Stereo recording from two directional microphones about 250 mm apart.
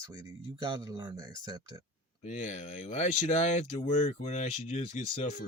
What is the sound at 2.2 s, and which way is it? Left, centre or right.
Speech, left.